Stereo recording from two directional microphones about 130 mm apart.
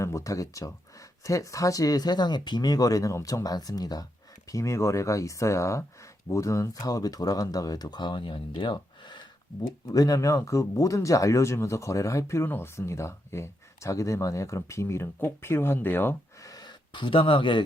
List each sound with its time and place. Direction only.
0.0 s speech: 25° left (ahead or behind); by 17.6 s 40° left (ahead or behind)